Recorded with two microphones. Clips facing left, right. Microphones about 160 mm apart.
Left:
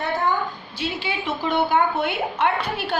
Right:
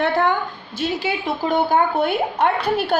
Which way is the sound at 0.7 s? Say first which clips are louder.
Right 5 dB; 40° right (ahead or behind).